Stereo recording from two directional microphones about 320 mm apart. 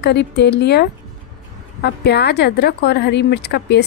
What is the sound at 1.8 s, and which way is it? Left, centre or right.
A woman's voice, left.